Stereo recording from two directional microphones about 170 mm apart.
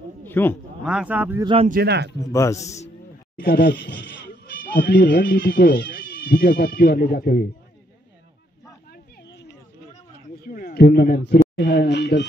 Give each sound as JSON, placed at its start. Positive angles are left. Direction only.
{"t": 0.2, "sound": "a sound", "side_deg": 10}
{"t": 0.8, "sound": "speech", "side_deg": -5}
{"t": 1.4, "sound": "speech", "side_deg": -30}
{"t": 1.7, "sound": "speech", "side_deg": -70}
{"t": 2.1, "sound": "a man's voice", "side_deg": 20}
{"t": 3.3, "sound": "speech", "side_deg": 65}
{"t": 4.6, "sound": "speech", "side_deg": 60}
{"t": 8.9, "sound": "a sound", "side_deg": 90}
{"t": 10.4, "sound": "a sound", "side_deg": 60}
{"t": 11.5, "sound": "speech", "side_deg": 80}